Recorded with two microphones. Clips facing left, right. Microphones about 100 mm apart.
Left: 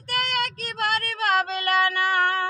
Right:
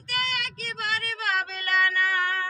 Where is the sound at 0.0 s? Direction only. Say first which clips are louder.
Left 5 dB; 50° left (ahead or behind).